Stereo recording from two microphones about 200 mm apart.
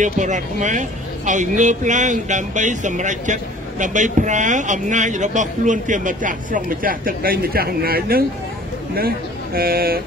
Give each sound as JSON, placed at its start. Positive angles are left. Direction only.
{"t": 0.0, "sound": "a man's voice", "side_deg": -40}